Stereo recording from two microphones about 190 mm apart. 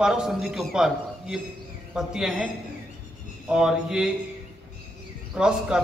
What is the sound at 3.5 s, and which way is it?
Speech, 5° right (ahead or behind).